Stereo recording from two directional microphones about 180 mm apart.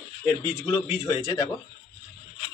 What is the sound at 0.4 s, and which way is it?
Speech, 20° left (ahead or behind).